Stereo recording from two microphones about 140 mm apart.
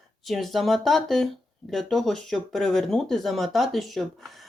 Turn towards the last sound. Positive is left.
turn(degrees=0)  # may be behind; listen again after turning